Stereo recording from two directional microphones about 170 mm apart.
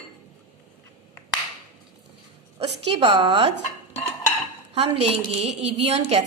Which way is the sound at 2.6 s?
35° right (ahead or behind).